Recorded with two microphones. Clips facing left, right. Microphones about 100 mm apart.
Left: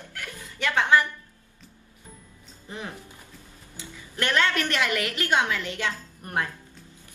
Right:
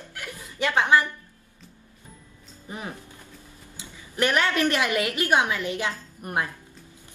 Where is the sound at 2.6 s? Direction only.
15° right (ahead or behind).